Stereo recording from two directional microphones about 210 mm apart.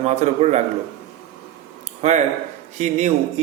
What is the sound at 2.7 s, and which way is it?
Speech, 35° right (ahead or behind).